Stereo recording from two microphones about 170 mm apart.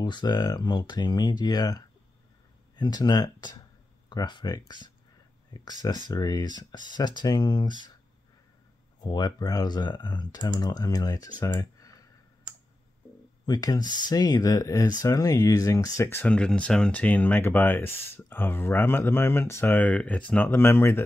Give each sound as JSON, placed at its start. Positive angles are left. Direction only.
{"t": 0.0, "sound": "speech", "side_deg": 25}
{"t": 9.0, "sound": "speech", "side_deg": 25}
{"t": 11.3, "sound": "clicking", "side_deg": 20}
{"t": 13.5, "sound": "speech", "side_deg": 25}